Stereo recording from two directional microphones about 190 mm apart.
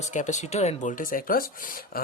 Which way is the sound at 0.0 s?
40° left (ahead or behind).